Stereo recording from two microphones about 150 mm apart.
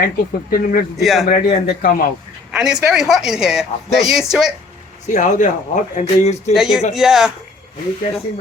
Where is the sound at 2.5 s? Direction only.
5° right (ahead or behind).